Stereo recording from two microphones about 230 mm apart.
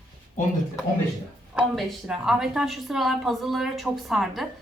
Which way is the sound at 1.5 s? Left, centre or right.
Centre.